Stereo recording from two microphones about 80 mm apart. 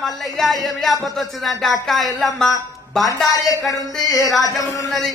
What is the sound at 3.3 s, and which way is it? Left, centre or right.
Speech, left.